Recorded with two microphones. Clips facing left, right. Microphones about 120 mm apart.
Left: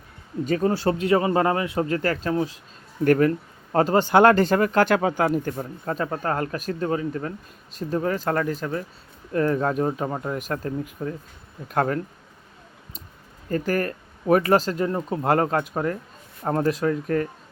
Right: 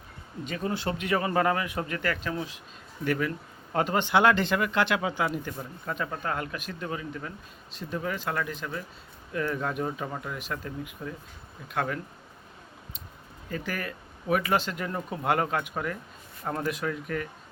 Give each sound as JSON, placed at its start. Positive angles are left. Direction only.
{"t": 0.4, "sound": "speech", "side_deg": 40}
{"t": 3.0, "sound": "speech", "side_deg": 50}
{"t": 13.5, "sound": "speech", "side_deg": 45}